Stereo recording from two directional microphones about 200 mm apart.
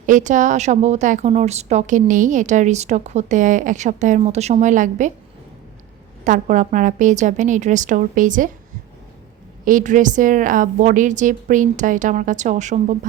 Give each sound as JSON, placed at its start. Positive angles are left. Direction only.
{"t": 0.0, "sound": "a woman's voice", "side_deg": -40}
{"t": 6.2, "sound": "a woman's voice", "side_deg": -40}
{"t": 9.6, "sound": "a woman's voice", "side_deg": -40}